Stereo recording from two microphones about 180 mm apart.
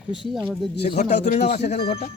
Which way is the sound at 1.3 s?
35° left (ahead or behind).